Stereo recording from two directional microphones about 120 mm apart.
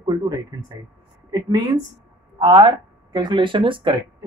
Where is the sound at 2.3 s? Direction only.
45° right (ahead or behind).